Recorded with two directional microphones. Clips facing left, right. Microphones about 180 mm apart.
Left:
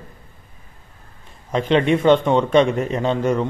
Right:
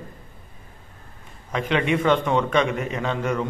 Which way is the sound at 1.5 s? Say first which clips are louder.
Left 5 dB; 30° left (ahead or behind).